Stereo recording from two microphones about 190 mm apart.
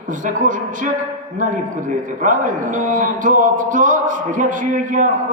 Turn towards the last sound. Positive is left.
turn(degrees=-45)  # may be behind; listen again after turning